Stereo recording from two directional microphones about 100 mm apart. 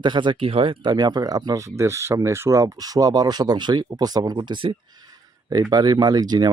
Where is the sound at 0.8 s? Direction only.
45° right (ahead or behind).